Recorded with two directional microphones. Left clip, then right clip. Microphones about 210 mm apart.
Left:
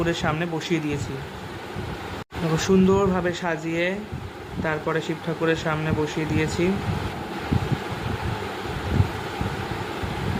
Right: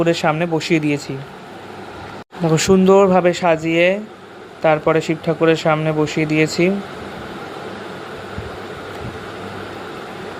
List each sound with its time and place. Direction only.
0.0 s speech: 30° right (ahead or behind)
2.6 s speech: 35° right (ahead or behind)